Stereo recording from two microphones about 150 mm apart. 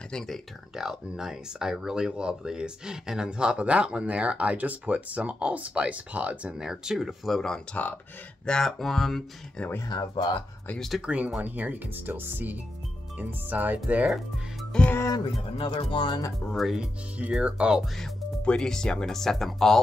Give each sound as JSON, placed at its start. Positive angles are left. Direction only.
{"t": 0.1, "sound": "speech", "side_deg": 0}
{"t": 9.7, "sound": "speech", "side_deg": 25}
{"t": 10.7, "sound": "speech", "side_deg": 0}
{"t": 15.5, "sound": "speech", "side_deg": 35}
{"t": 16.5, "sound": "speech", "side_deg": -5}